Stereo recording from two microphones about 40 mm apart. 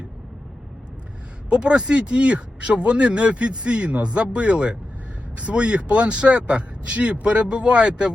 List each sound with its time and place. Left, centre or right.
1.5 s speech: right